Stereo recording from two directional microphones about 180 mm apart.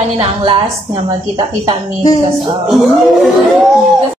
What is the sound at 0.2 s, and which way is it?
A woman's voice, 30° right (ahead or behind).